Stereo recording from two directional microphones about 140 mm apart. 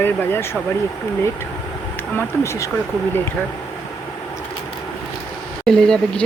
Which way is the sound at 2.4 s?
20° left (ahead or behind).